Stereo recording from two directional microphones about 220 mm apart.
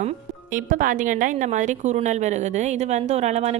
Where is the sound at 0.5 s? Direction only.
35° right (ahead or behind).